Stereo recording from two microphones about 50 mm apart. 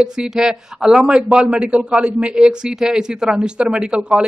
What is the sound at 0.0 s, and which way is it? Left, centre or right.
A man's voice, centre.